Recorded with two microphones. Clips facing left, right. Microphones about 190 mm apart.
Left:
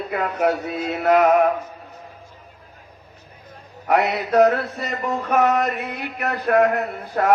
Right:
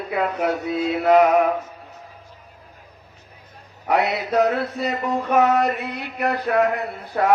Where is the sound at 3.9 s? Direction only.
50° left (ahead or behind).